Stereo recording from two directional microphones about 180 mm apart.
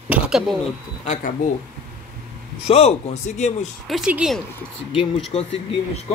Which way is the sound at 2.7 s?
35° left (ahead or behind).